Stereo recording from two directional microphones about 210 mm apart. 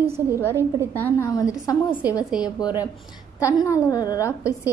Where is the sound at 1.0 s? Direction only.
10° left (ahead or behind).